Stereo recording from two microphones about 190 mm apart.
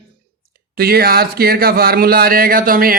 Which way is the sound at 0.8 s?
55° right (ahead or behind).